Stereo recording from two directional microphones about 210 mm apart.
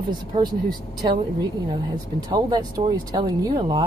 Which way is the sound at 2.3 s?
20° right (ahead or behind).